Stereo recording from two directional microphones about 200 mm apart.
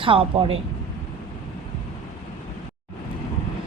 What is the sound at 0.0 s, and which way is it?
Speech, 25° right (ahead or behind).